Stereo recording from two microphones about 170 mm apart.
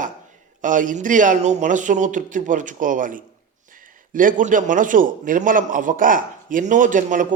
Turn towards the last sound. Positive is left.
turn(degrees=-50)  # may be behind; listen again after turning